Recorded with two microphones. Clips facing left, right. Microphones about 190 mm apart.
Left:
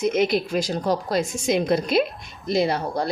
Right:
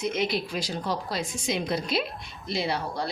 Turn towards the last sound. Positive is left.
turn(degrees=45)  # may be behind; listen again after turning